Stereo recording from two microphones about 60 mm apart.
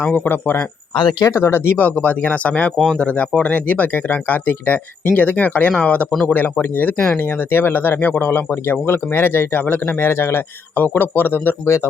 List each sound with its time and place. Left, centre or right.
0.0 s speech: left
0.3 s speech: left
2.0 s speech: left
6.2 s speech: left
10.8 s speech: left